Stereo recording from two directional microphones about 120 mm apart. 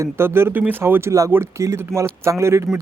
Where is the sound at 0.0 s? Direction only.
20° right (ahead or behind).